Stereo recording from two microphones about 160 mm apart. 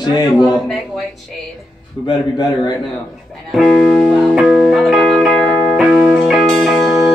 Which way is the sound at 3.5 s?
Centre (ahead or behind).